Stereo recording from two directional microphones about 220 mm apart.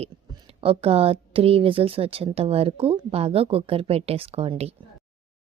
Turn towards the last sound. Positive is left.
turn(degrees=-25)  # may be behind; listen again after turning